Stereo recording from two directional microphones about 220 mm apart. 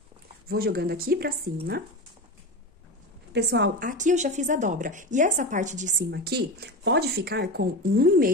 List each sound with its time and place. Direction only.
0.5 s speech: 45° right (ahead or behind)
3.3 s speech: 50° right (ahead or behind)
3.9 s a woman's voice: 35° right (ahead or behind)